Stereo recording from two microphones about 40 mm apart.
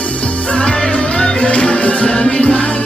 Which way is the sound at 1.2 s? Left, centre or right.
Left.